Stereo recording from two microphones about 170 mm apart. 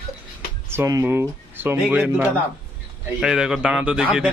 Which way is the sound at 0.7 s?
15° right (ahead or behind).